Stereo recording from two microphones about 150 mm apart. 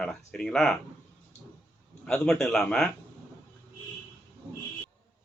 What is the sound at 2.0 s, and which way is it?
Speech, 5° left (ahead or behind).